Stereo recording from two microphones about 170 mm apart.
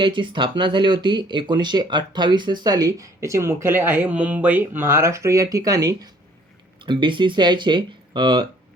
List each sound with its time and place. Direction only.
0.0 s speech: 30° right (ahead or behind)